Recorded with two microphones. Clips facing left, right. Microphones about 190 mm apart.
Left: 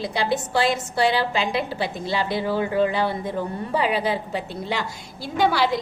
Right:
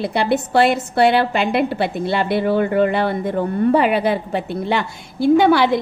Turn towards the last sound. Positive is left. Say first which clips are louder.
# right 8 dB
turn(degrees=-55)  # may be behind; listen again after turning